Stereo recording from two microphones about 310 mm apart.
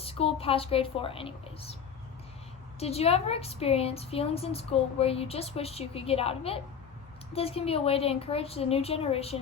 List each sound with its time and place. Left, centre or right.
0.0 s a woman's voice: centre
2.8 s a woman's voice: centre